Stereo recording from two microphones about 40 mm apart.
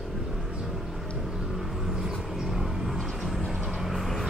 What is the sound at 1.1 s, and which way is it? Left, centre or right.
Vehicle, centre.